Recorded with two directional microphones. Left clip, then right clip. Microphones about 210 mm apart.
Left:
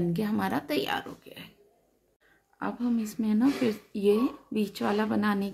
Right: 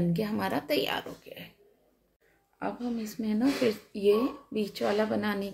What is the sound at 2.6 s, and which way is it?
Speech, 25° left (ahead or behind).